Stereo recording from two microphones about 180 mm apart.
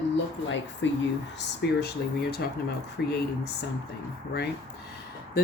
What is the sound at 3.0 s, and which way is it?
Speech, 65° left (ahead or behind).